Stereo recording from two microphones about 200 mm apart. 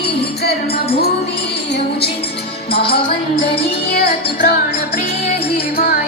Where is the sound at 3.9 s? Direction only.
50° left (ahead or behind).